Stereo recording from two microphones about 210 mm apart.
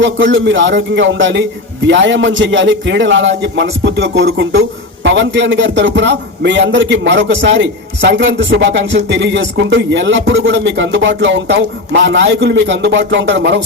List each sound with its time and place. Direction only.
0.0 s a man's voice: 60° right (ahead or behind)